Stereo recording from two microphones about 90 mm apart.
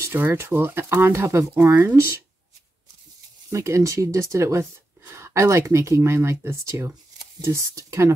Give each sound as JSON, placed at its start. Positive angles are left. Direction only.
{"t": 0.0, "sound": "speech", "side_deg": -25}
{"t": 3.4, "sound": "speech", "side_deg": -35}